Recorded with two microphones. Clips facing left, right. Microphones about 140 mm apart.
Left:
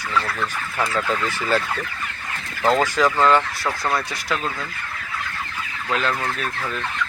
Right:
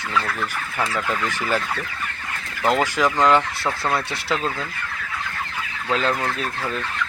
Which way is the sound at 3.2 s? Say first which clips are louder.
Even; 15° right (ahead or behind).